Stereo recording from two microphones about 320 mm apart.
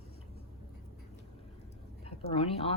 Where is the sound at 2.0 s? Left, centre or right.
Centre.